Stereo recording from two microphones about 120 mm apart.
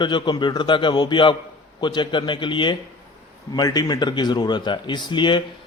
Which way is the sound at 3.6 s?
35° left (ahead or behind).